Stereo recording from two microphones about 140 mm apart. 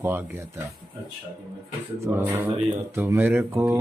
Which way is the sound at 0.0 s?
15° right (ahead or behind).